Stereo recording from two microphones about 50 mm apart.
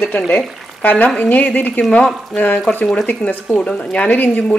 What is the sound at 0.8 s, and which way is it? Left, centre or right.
A woman's voice, left.